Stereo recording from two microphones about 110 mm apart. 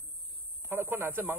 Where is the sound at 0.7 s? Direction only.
20° right (ahead or behind).